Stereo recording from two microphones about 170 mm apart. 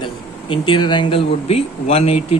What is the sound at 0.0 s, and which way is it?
Speech, 30° left (ahead or behind).